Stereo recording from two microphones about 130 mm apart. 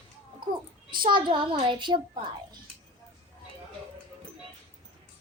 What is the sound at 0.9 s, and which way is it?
A child's voice, 40° right (ahead or behind).